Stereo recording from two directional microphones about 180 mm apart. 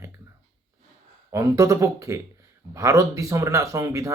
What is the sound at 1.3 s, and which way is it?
Speech, 15° right (ahead or behind).